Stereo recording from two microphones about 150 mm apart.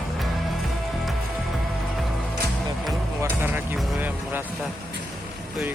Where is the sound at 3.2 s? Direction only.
15° right (ahead or behind).